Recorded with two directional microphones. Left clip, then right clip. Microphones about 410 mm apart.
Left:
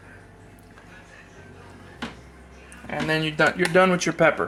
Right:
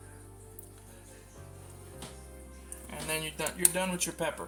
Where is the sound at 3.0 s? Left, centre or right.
Right.